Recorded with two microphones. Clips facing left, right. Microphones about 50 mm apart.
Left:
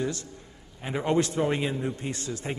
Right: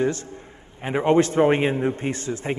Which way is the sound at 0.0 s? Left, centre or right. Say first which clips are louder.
Right 7 dB; right.